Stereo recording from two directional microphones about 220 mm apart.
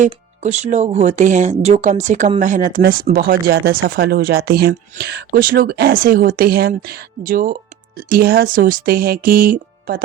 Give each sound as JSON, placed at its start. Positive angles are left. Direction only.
{"t": 0.0, "sound": "speech", "side_deg": -30}